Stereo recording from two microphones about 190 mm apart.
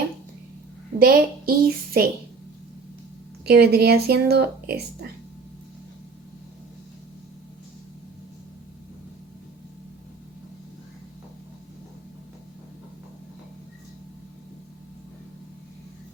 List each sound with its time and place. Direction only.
0.9 s a woman's voice: 50° right (ahead or behind)
3.4 s speech: 55° right (ahead or behind)